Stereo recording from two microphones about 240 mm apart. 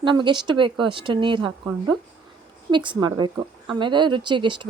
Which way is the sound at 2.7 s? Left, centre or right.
Centre.